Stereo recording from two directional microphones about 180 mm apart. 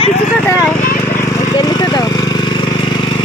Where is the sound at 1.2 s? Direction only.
20° left (ahead or behind).